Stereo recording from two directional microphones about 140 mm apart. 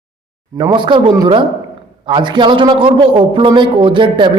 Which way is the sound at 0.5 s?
35° right (ahead or behind).